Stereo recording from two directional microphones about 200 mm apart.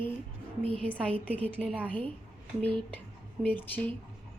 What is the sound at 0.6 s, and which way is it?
Speech, 30° right (ahead or behind).